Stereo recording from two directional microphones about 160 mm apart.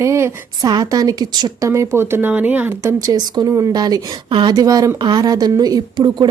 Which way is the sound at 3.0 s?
25° right (ahead or behind).